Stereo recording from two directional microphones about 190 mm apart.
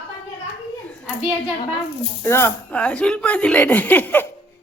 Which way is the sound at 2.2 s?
15° left (ahead or behind).